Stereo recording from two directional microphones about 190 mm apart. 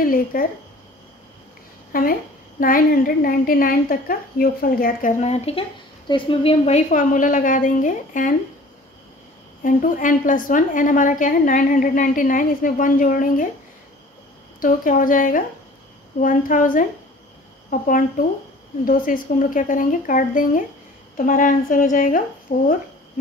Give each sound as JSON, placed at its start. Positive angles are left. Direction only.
{"t": 0.0, "sound": "a woman's voice", "side_deg": 50}
{"t": 1.9, "sound": "a woman's voice", "side_deg": 50}
{"t": 9.6, "sound": "a woman's voice", "side_deg": 45}
{"t": 14.6, "sound": "a woman's voice", "side_deg": 45}